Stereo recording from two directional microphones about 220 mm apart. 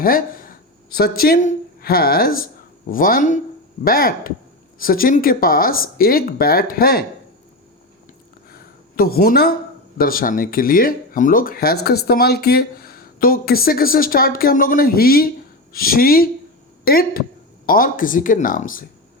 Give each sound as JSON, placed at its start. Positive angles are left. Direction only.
{"t": 0.0, "sound": "speech", "side_deg": 40}
{"t": 8.4, "sound": "a sound", "side_deg": 45}
{"t": 10.0, "sound": "a woman's voice", "side_deg": 40}